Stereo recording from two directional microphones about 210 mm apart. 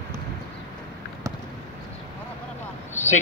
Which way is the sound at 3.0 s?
35° left (ahead or behind).